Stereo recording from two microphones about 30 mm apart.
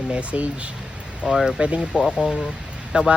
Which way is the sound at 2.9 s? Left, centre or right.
Right.